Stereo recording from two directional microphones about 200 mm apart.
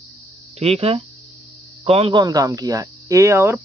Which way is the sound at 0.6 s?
30° right (ahead or behind).